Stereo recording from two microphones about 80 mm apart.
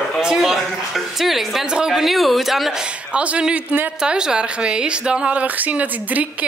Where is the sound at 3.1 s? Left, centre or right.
Centre.